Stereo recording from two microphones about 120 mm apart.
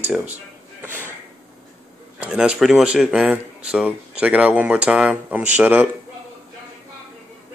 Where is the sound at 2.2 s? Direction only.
10° right (ahead or behind).